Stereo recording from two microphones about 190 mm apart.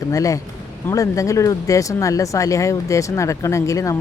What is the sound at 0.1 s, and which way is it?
A woman's voice, 15° left (ahead or behind).